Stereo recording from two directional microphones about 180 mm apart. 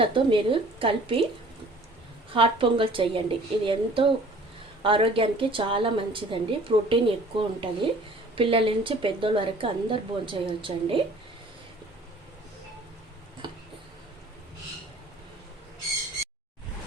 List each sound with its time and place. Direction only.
0.0 s a woman's voice: 30° right (ahead or behind)
2.3 s a woman's voice: 30° right (ahead or behind)